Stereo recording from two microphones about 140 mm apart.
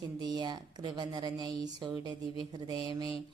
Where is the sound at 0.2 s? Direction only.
30° right (ahead or behind).